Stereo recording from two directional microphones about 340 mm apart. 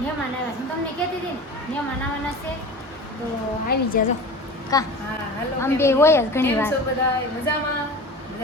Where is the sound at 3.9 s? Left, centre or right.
Left.